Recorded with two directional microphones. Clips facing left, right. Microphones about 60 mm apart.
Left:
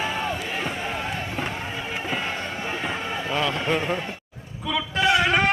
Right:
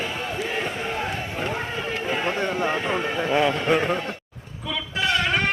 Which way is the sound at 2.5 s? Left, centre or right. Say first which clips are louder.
Right 6 dB; right.